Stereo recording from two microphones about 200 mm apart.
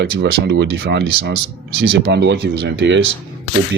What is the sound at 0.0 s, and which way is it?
Speech, 55° right (ahead or behind).